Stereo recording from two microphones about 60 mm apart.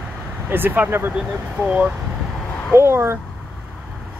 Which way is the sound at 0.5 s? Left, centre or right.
Right.